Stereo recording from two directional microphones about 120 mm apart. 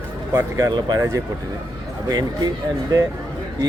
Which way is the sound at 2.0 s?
35° right (ahead or behind).